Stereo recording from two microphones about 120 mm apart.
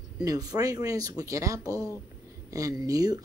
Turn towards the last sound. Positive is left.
turn(degrees=-30)  # may be behind; listen again after turning